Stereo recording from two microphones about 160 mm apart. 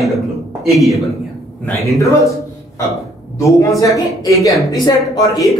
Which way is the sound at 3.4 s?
20° left (ahead or behind).